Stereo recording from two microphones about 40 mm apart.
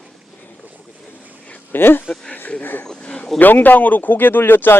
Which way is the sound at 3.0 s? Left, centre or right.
Left.